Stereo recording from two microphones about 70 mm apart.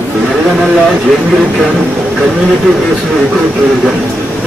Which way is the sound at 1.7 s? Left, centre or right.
Centre.